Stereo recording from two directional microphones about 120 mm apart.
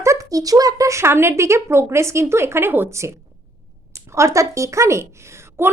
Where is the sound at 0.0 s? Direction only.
25° right (ahead or behind).